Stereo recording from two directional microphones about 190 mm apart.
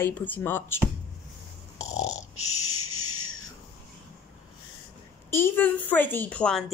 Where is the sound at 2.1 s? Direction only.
90° left.